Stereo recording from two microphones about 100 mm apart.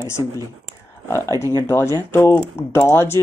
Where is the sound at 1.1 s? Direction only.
30° left (ahead or behind).